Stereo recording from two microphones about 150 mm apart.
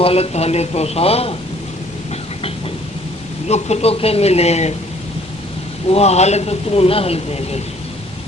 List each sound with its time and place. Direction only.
0.0 s a man's voice: 40° left (ahead or behind)
3.5 s a man's voice: 45° left (ahead or behind)
5.9 s a man's voice: 45° left (ahead or behind)